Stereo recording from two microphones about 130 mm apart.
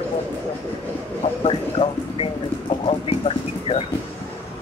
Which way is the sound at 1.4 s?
45° left (ahead or behind).